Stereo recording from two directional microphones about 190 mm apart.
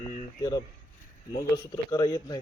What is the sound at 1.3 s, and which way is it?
A man's voice, 20° left (ahead or behind).